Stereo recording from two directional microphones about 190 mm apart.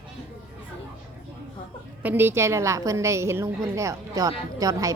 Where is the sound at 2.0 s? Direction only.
10° right (ahead or behind).